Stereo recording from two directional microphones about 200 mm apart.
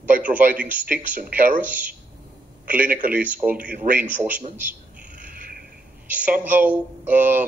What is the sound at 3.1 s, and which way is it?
Speech, 10° right (ahead or behind).